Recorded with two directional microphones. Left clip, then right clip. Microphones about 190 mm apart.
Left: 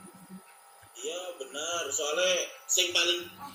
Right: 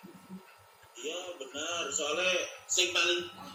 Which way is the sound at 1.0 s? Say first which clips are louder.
Left 2 dB; 20° left (ahead or behind).